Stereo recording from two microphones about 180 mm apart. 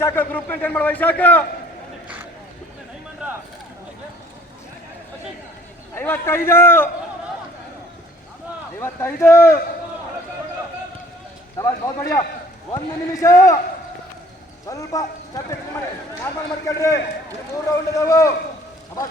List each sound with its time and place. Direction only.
0.0 s a man's voice: 10° left (ahead or behind)
5.9 s a man's voice: 10° left (ahead or behind)
8.8 s a man's voice: 15° left (ahead or behind)
11.5 s a man's voice: 15° left (ahead or behind)
13.2 s a man's voice: 15° left (ahead or behind)
14.7 s a man's voice: 20° left (ahead or behind)